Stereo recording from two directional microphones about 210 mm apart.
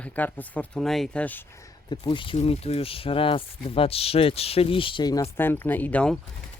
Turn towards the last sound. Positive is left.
turn(degrees=5)  # may be behind; listen again after turning